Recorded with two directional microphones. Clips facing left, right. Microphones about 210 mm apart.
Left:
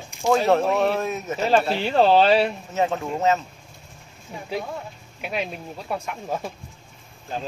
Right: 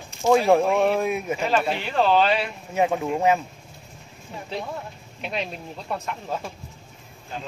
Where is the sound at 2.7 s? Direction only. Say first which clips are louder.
Right 1 dB; 10° right (ahead or behind).